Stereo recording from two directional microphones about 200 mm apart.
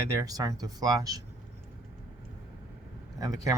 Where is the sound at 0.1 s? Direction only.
15° right (ahead or behind).